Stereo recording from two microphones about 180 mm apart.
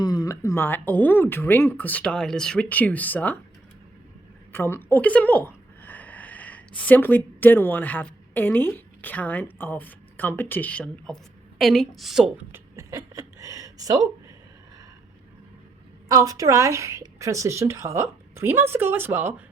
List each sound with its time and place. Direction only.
0.0 s speech: 20° left (ahead or behind)
4.5 s speech: 10° left (ahead or behind); by 14.0 s 20° right (ahead or behind)
16.0 s a woman's voice: 20° right (ahead or behind)